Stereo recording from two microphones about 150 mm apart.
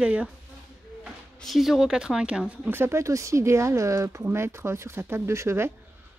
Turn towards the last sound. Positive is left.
turn(degrees=-20)  # may be behind; listen again after turning